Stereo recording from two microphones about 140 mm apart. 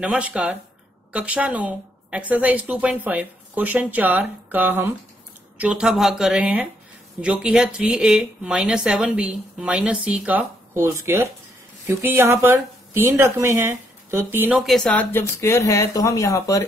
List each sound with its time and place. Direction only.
0.0 s speech: 10° right (ahead or behind)
14.6 s speech: centre (ahead or behind); by 16.6 s 25° left (ahead or behind)